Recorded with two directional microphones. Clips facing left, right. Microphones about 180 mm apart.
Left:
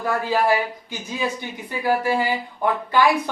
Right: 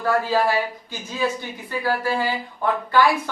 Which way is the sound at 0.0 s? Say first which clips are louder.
Right 1 dB; 15° left (ahead or behind).